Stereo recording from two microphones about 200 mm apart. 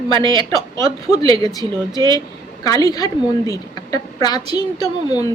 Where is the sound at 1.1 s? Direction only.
20° left (ahead or behind).